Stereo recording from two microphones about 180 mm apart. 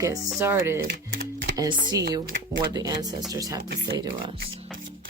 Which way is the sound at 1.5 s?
20° right (ahead or behind).